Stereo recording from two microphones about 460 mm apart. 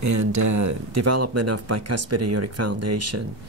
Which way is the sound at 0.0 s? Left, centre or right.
Right.